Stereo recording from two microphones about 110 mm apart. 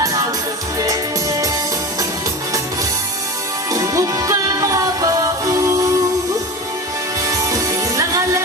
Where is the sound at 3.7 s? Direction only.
30° right (ahead or behind).